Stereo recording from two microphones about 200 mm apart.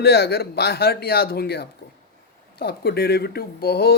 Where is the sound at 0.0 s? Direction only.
55° left (ahead or behind).